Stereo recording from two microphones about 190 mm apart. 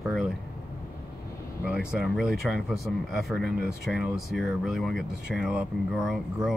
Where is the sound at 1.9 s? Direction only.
Centre (ahead or behind).